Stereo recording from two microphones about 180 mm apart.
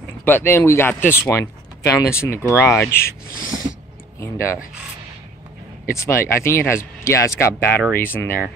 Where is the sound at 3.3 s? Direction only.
50° left (ahead or behind).